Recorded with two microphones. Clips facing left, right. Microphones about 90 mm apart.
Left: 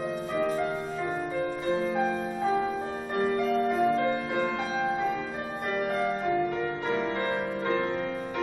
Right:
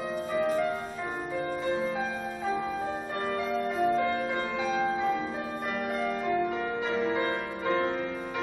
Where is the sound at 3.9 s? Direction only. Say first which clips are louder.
Left 1 dB; centre (ahead or behind).